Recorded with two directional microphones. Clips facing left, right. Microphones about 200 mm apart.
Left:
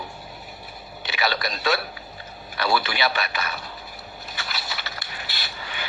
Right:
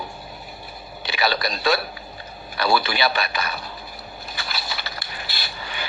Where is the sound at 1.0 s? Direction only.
35° right (ahead or behind).